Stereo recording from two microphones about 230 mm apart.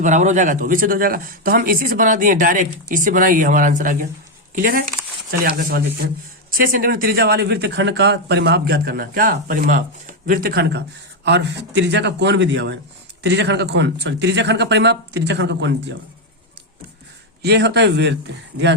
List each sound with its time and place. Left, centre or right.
0.0 s speech: right
17.4 s speech: right